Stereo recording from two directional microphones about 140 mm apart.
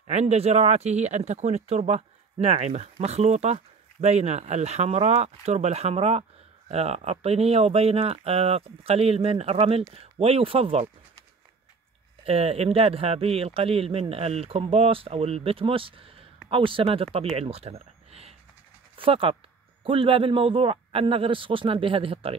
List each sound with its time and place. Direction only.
0.0 s speech: 50° right (ahead or behind)
12.3 s a man's voice: 45° right (ahead or behind)